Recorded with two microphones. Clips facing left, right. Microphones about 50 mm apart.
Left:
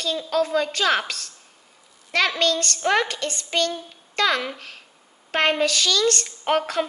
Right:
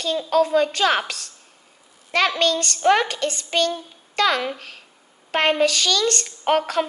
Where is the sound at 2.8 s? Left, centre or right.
Right.